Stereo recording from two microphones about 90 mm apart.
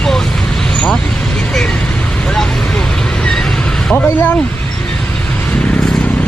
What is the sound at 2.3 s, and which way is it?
Vehicle, 5° left (ahead or behind).